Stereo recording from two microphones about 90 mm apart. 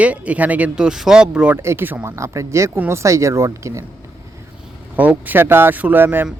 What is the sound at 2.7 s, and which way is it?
Speech, 20° right (ahead or behind).